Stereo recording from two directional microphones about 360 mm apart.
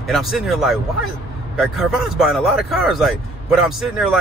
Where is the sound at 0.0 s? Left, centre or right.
Centre.